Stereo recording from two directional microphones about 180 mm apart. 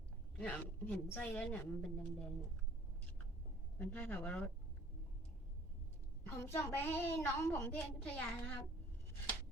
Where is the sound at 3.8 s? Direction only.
10° left (ahead or behind).